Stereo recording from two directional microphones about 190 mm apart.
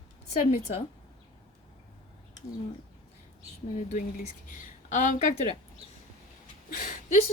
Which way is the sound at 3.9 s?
40° left (ahead or behind).